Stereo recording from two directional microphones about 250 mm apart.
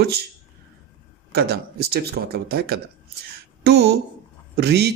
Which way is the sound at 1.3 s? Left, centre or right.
Right.